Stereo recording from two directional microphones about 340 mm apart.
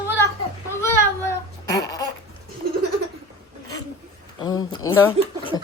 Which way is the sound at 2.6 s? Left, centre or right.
Right.